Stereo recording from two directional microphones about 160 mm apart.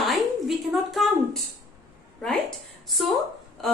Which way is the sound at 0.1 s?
Centre (ahead or behind).